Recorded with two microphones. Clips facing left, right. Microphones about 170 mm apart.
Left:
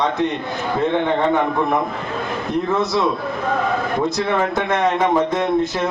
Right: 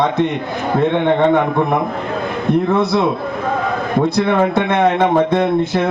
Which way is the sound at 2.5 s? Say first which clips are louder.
Right 5 dB; 60° right (ahead or behind).